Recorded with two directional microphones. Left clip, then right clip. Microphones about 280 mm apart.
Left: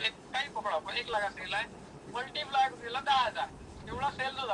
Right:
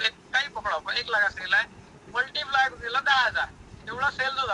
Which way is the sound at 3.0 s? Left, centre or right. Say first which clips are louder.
Right 5 dB; right.